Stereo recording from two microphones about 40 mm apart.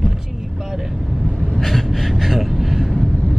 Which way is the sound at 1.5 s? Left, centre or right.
Centre.